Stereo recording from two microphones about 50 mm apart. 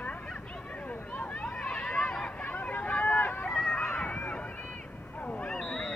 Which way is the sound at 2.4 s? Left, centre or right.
Left.